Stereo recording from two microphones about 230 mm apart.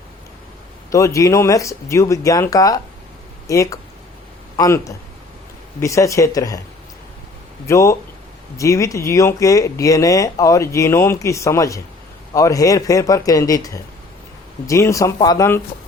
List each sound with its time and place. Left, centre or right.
0.9 s speech: centre
7.7 s speech: centre